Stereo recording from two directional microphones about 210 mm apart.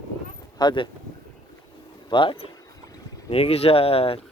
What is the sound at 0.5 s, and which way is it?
Speech, 20° left (ahead or behind).